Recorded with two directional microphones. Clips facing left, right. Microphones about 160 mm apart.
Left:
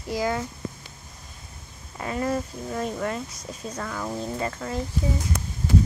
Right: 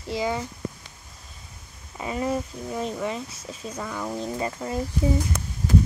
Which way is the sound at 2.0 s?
10° right (ahead or behind).